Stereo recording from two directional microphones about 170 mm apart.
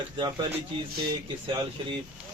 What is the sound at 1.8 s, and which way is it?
Speech, 30° right (ahead or behind).